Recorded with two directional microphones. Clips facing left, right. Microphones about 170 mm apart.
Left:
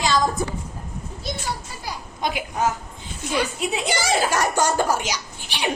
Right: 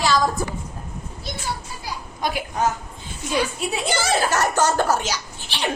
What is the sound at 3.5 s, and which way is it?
Speech, 20° left (ahead or behind).